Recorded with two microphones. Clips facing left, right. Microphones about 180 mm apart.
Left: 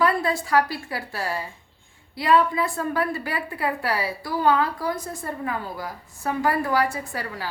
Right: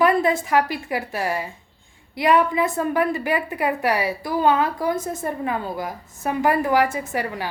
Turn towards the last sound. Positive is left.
turn(degrees=-20)  # may be behind; listen again after turning